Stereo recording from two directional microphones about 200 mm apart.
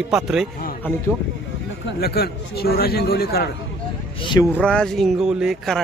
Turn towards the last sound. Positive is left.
turn(degrees=0)  # may be behind; listen again after turning